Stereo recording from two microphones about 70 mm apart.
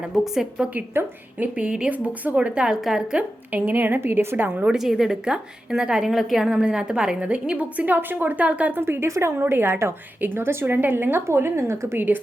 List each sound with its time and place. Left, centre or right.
0.1 s a woman's voice: centre
0.9 s a woman's voice: right
1.5 s a woman's voice: centre; by 4.6 s right
4.6 s a woman's voice: centre
8.8 s a woman's voice: right